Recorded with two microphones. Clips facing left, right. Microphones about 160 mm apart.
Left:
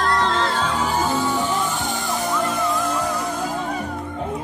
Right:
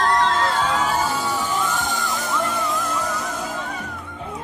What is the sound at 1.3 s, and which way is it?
Music, 40° left (ahead or behind).